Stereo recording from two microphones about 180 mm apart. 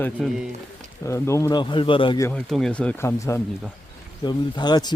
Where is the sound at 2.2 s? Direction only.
5° left (ahead or behind).